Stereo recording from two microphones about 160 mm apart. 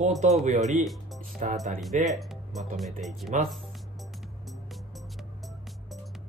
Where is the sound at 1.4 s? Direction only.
50° right (ahead or behind).